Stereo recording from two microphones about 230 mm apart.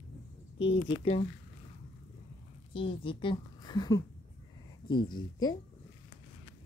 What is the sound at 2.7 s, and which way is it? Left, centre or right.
A woman's voice, left.